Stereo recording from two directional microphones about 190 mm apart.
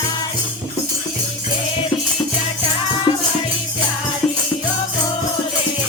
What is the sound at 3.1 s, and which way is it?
Music, 25° left (ahead or behind).